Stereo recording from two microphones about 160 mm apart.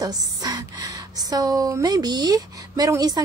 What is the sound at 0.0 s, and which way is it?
A woman's voice, 25° right (ahead or behind).